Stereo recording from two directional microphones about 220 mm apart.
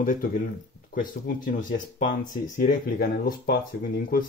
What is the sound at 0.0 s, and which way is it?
Speech, 40° left (ahead or behind).